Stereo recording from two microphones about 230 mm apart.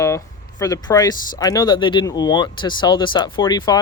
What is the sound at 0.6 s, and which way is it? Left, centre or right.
Speech, centre.